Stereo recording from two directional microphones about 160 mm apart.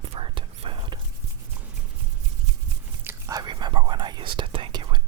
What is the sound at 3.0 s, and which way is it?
Whispering, 20° right (ahead or behind).